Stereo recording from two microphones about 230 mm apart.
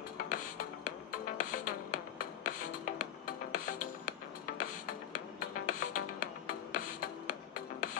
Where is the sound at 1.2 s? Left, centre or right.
Left.